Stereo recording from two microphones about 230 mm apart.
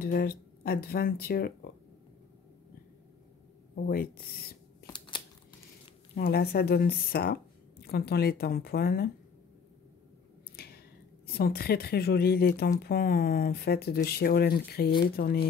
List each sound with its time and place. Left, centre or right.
0.0 s speech: left
3.7 s speech: left
4.8 s a sound: left
6.1 s speech: left
10.5 s a sound: left
11.2 s speech: left